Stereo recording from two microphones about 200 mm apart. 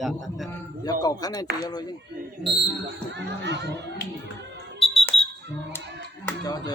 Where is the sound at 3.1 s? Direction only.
60° right (ahead or behind).